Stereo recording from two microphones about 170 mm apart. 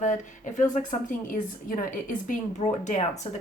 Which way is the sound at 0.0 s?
45° left (ahead or behind).